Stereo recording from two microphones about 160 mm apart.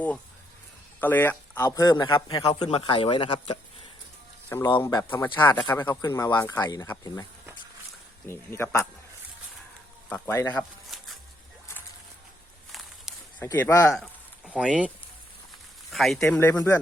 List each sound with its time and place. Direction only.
1.0 s a man's voice: 10° left (ahead or behind)
2.4 s speech: 35° left (ahead or behind)
4.5 s a man's voice: 20° left (ahead or behind)
5.1 s a man's voice: 10° left (ahead or behind)
8.3 s speech: 15° left (ahead or behind)
10.2 s a man's voice: 20° left (ahead or behind)
10.6 s a sound: centre (ahead or behind)
13.6 s speech: 20° left (ahead or behind)
13.9 s speech: centre (ahead or behind); by 16.7 s 20° left (ahead or behind)